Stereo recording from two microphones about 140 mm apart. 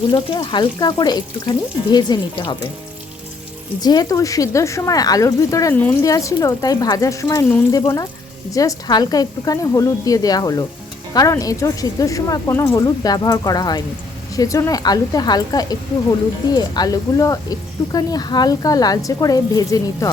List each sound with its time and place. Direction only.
0.1 s speech: 35° left (ahead or behind)
3.8 s speech: 30° left (ahead or behind)